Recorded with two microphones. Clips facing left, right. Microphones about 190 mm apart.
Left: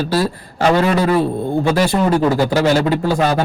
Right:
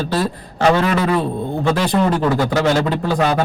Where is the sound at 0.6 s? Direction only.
35° left (ahead or behind).